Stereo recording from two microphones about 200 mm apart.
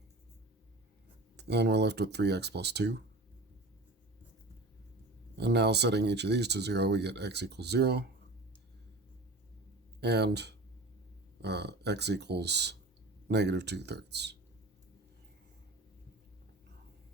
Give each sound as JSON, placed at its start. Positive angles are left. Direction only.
{"t": 1.4, "sound": "speech", "side_deg": -55}
{"t": 5.4, "sound": "speech", "side_deg": -55}
{"t": 10.0, "sound": "speech", "side_deg": -55}